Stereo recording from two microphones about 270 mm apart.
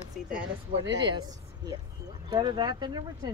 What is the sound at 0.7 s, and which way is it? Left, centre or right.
Speech, right.